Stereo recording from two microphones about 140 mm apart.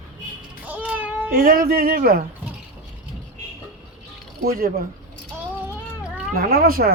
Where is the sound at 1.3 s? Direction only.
90° right.